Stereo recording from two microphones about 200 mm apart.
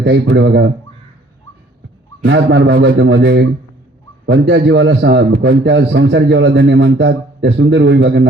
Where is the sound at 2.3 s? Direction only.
65° right (ahead or behind).